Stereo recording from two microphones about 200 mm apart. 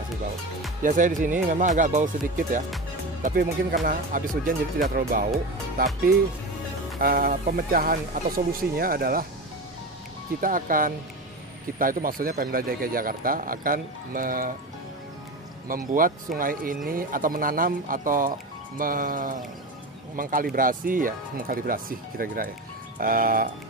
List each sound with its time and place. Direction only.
0.8 s speech: 40° right (ahead or behind)
3.2 s speech: 45° right (ahead or behind)
7.0 s speech: 45° right (ahead or behind)
10.4 s speech: 45° right (ahead or behind)
15.7 s speech: 45° right (ahead or behind)